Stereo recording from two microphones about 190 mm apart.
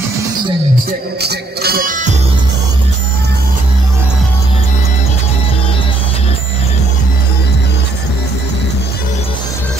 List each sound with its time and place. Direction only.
1.2 s music: 55° right (ahead or behind)